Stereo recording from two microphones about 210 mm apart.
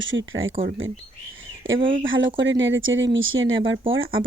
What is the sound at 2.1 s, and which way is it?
Speech, 60° right (ahead or behind).